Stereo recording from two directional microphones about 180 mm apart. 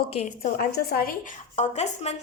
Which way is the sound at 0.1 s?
35° left (ahead or behind).